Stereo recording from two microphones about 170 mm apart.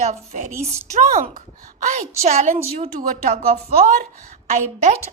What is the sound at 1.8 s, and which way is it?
A woman's voice, 45° right (ahead or behind).